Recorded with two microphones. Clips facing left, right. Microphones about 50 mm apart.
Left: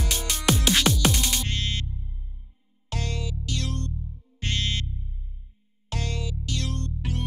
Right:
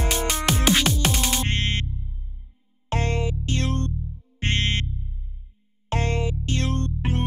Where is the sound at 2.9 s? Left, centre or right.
Right.